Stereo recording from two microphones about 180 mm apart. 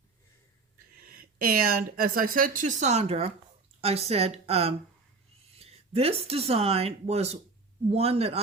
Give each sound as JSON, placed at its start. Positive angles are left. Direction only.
{"t": 1.1, "sound": "a woman's voice", "side_deg": -55}